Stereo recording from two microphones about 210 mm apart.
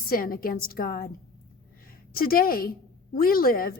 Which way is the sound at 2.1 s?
45° left (ahead or behind).